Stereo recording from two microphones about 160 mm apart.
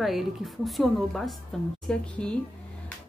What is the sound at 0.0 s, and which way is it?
Speech, centre (ahead or behind).